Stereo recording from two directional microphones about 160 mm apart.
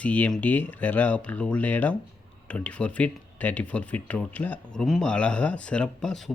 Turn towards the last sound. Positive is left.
turn(degrees=0)  # may be behind; listen again after turning